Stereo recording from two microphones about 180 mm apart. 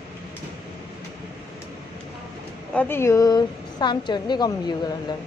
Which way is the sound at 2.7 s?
10° left (ahead or behind).